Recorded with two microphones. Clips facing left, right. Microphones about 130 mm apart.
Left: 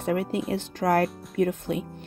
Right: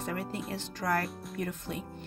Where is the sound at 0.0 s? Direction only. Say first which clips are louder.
Left 9 dB; 65° left (ahead or behind).